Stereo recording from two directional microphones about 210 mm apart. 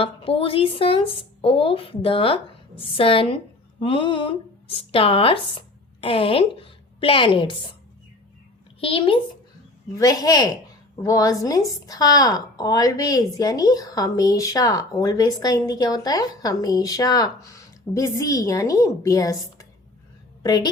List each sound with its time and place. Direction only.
0.0 s a woman's voice: 25° left (ahead or behind)
8.8 s a woman's voice: 25° left (ahead or behind)